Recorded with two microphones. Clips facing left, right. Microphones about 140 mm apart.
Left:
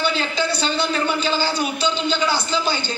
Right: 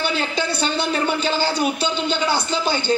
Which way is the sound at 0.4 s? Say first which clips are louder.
Left 1 dB; 55° right (ahead or behind).